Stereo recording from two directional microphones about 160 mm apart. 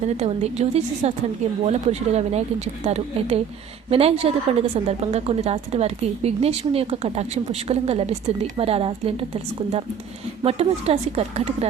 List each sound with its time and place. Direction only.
0.0 s a woman's voice: 40° right (ahead or behind)